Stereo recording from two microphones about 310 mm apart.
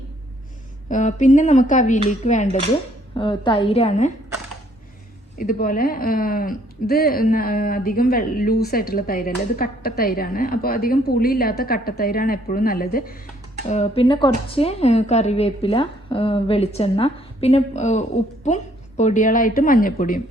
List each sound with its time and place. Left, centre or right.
0.9 s a woman's voice: left
5.4 s speech: left